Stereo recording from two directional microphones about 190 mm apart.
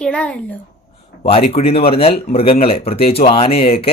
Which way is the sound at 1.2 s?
30° left (ahead or behind).